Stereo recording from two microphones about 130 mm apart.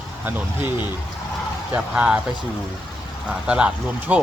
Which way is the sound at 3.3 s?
10° right (ahead or behind).